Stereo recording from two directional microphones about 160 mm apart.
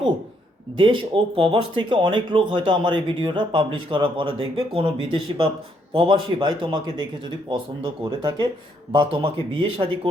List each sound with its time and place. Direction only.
0.8 s a man's voice: 30° right (ahead or behind)